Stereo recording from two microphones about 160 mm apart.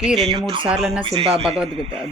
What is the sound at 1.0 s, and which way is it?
Speech, 35° right (ahead or behind).